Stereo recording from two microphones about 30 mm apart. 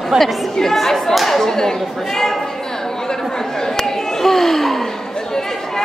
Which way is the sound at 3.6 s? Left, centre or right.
Centre.